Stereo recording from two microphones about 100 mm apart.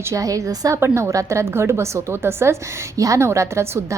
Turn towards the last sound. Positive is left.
turn(degrees=-25)  # may be behind; listen again after turning